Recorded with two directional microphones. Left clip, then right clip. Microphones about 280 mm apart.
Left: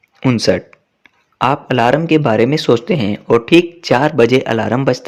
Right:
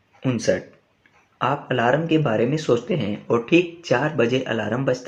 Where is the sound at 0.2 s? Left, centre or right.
Left.